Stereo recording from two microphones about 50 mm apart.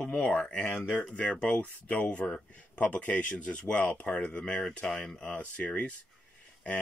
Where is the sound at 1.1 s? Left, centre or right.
Centre.